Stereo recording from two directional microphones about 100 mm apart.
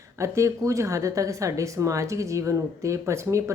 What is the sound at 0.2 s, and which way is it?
Speech, 30° right (ahead or behind).